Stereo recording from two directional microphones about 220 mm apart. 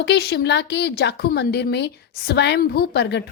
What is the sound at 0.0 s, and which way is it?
A woman's voice, 50° left (ahead or behind).